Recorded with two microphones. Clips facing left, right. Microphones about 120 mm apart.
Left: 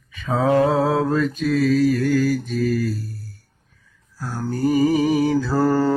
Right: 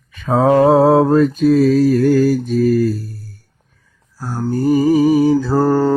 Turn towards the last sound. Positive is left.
turn(degrees=-15)  # may be behind; listen again after turning